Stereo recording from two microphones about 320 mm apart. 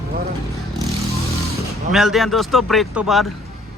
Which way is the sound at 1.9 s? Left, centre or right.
Centre.